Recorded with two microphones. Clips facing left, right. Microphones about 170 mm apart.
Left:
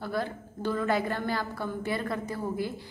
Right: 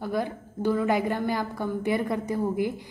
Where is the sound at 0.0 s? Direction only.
15° right (ahead or behind).